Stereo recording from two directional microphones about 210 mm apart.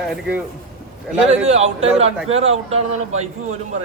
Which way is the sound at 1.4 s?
30° right (ahead or behind).